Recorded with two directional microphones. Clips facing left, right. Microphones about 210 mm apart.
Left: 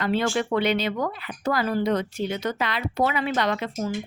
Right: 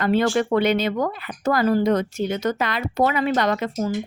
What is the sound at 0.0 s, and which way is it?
Speech, 50° right (ahead or behind).